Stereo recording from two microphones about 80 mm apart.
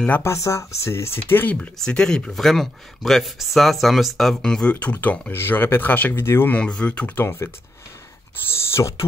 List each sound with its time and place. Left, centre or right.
0.2 s speech: left
1.8 s speech: centre; by 6.5 s left
6.5 s speech: centre
7.2 s speech: left
8.8 s speech: left